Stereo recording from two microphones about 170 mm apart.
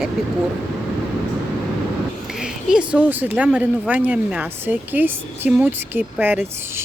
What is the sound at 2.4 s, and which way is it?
Speech, 5° right (ahead or behind).